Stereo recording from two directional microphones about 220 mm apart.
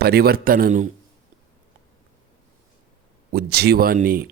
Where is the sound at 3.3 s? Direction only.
45° right (ahead or behind).